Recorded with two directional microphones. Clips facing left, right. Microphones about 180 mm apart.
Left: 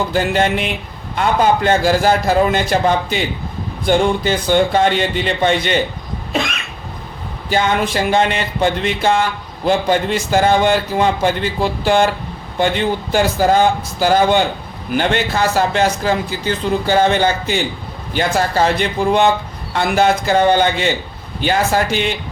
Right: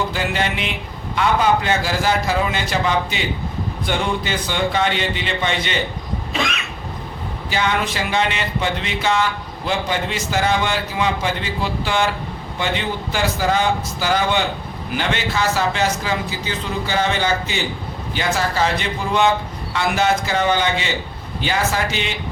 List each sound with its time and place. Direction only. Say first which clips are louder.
0.1 s a man's voice: left 6 dB; 45° left (ahead or behind)
7.5 s a man's voice: left 5 dB; 45° left (ahead or behind)